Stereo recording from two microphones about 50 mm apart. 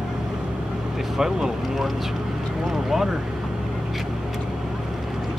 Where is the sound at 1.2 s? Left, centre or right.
Centre.